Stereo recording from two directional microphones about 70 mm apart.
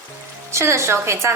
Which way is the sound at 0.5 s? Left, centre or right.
Right.